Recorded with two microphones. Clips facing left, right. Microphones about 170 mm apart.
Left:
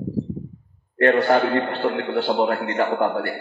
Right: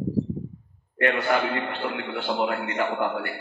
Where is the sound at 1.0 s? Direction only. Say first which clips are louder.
Left 6 dB; 40° left (ahead or behind).